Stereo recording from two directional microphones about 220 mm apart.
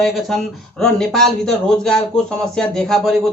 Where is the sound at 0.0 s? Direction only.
Centre (ahead or behind).